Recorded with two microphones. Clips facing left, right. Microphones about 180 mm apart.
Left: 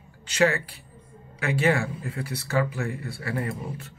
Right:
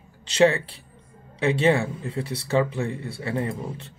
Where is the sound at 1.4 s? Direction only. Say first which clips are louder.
Right 3 dB; 25° right (ahead or behind).